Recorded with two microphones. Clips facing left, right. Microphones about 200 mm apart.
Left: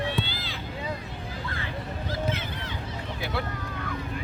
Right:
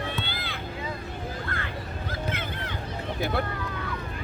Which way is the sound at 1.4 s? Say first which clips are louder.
Even; 55° right (ahead or behind).